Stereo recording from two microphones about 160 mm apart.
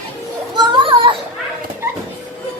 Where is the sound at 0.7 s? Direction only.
30° right (ahead or behind).